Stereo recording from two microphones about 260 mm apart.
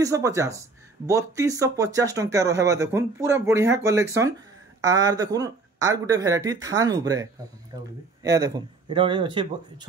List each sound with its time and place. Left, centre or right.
0.0 s speech: centre